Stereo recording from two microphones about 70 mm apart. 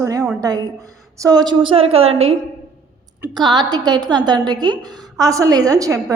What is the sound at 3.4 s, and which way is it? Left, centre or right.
A woman's voice, right.